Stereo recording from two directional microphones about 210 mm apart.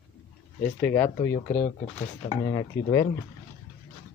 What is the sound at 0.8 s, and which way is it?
Speech, 10° left (ahead or behind).